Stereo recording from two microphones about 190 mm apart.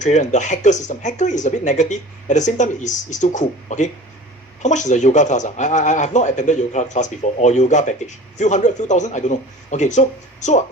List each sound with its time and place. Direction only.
0.0 s speech: 40° left (ahead or behind)